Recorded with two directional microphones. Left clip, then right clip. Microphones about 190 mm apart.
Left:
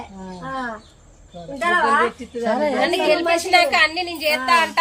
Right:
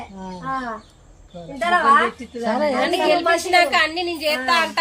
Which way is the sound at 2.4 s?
10° right (ahead or behind).